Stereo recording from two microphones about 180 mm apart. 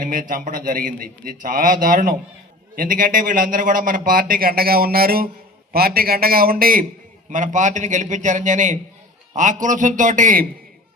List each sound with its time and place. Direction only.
0.0 s a man's voice: 50° right (ahead or behind)